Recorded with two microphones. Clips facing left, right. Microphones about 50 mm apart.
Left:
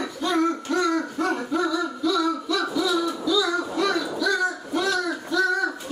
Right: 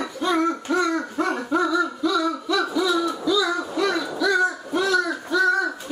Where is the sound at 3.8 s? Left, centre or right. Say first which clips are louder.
Right 3 dB; centre.